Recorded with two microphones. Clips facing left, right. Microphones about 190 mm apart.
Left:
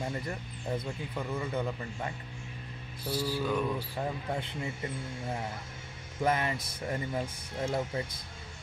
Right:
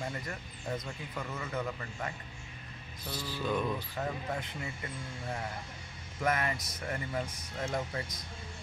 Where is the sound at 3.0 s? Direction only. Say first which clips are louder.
Left 5 dB; 10° left (ahead or behind).